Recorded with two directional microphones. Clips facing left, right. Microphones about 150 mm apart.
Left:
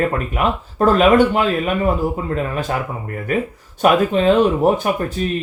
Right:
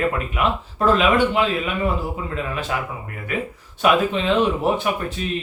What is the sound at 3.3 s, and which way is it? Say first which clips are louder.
Speech: left 6 dB; 40° left (ahead or behind).